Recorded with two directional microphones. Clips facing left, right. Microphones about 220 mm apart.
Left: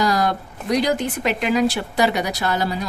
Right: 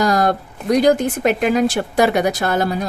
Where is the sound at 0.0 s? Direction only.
50° right (ahead or behind).